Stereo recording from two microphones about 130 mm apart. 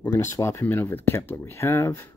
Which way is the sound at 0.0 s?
20° left (ahead or behind).